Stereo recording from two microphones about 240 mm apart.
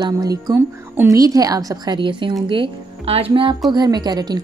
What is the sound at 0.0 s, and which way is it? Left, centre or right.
Speech, centre.